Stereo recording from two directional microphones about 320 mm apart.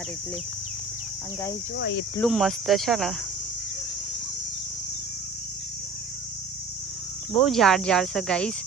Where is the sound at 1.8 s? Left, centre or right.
Left.